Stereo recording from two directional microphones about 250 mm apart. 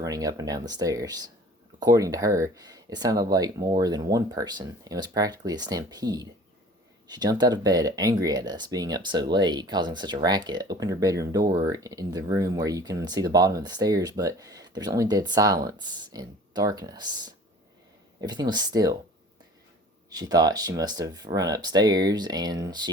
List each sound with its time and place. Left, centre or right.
0.0 s speech: centre
20.1 s speech: centre